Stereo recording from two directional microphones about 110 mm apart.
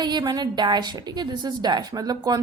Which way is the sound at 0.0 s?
40° right (ahead or behind).